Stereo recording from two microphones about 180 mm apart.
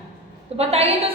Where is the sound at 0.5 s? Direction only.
35° right (ahead or behind).